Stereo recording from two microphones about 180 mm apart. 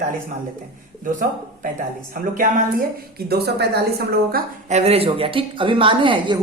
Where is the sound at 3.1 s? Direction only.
60° right (ahead or behind).